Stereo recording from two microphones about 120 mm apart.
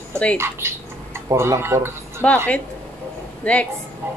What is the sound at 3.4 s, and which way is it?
Speech, 10° left (ahead or behind).